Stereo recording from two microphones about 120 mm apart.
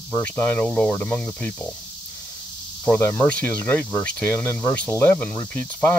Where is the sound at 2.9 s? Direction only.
20° left (ahead or behind).